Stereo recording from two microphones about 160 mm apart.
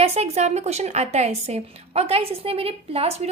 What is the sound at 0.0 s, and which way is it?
A woman's voice, 40° right (ahead or behind).